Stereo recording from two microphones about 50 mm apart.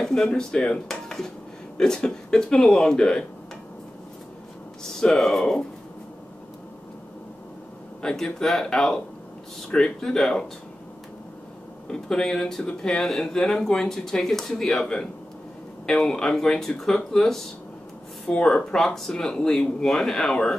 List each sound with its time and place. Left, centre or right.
0.0 s speech: centre
4.8 s speech: centre
8.0 s speech: centre
9.7 s speech: left
9.9 s speech: centre
11.9 s speech: centre
15.9 s speech: centre